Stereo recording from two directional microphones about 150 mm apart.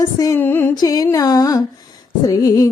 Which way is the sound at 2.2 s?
25° left (ahead or behind).